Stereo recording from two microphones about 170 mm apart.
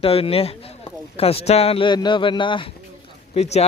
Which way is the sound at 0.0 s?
35° left (ahead or behind).